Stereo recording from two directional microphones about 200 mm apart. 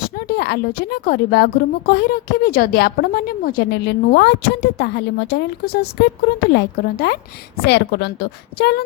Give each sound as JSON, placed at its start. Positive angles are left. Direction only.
{"t": 0.2, "sound": "a woman's voice", "side_deg": 50}